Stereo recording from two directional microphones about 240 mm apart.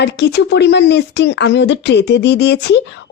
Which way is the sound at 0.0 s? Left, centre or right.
Left.